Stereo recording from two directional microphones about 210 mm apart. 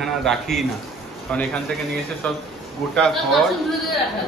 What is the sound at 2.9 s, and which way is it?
Speech, 5° left (ahead or behind).